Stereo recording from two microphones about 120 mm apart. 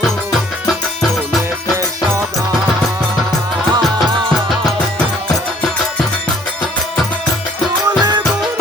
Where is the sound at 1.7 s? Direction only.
25° right (ahead or behind).